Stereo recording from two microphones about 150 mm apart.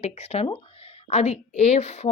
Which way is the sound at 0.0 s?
45° left (ahead or behind).